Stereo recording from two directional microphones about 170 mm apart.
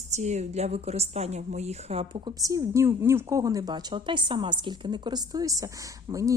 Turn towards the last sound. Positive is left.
turn(degrees=-20)  # may be behind; listen again after turning